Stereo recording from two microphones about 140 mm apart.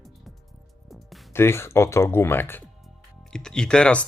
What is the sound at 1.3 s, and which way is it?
Speech, 15° left (ahead or behind).